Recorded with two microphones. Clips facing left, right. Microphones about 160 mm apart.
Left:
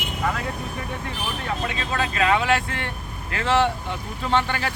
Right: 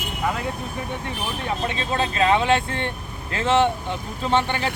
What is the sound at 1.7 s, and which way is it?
Speech, 25° right (ahead or behind).